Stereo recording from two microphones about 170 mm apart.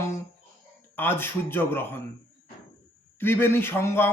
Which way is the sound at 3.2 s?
15° left (ahead or behind).